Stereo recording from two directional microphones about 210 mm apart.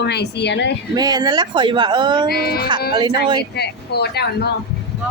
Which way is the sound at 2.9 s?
20° right (ahead or behind).